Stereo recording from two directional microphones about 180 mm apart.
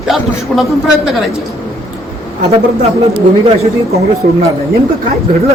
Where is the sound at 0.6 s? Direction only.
Centre (ahead or behind).